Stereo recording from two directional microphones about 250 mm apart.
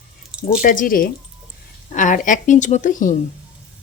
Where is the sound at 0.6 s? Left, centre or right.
Left.